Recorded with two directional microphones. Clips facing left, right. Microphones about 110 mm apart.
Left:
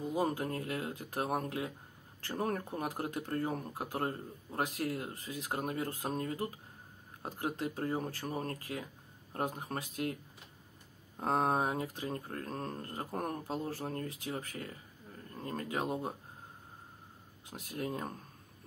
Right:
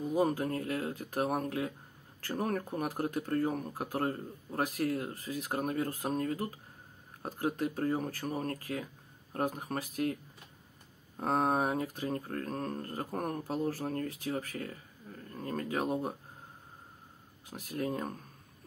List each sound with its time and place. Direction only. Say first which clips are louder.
0.0 s a sound: right 4 dB; 25° left (ahead or behind)
0.5 s speech: right 3 dB; 30° left (ahead or behind)
11.1 s speech: right 1 dB; 25° left (ahead or behind)
17.9 s speech: right 3 dB; 30° left (ahead or behind)